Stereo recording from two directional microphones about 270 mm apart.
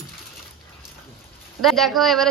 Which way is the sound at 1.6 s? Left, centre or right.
Centre.